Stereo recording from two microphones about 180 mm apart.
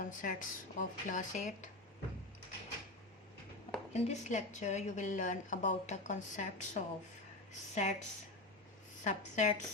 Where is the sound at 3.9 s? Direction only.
40° left (ahead or behind).